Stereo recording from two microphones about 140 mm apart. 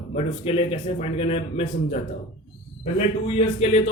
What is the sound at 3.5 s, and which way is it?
Speech, 50° left (ahead or behind).